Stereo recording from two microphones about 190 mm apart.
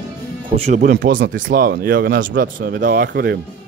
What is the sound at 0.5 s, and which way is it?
Speech, 35° right (ahead or behind).